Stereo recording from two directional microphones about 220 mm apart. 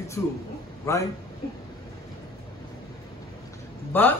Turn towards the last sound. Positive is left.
turn(degrees=10)  # may be behind; listen again after turning